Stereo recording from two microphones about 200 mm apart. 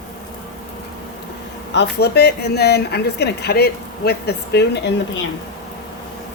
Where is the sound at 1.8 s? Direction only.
55° left (ahead or behind).